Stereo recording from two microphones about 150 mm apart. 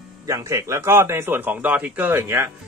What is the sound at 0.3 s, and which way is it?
Speech, 20° right (ahead or behind).